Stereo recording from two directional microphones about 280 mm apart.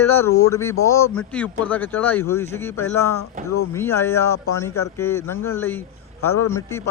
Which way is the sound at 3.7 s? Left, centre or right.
Centre.